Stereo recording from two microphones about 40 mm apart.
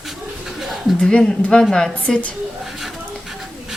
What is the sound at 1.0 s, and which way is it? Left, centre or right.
Speech, left.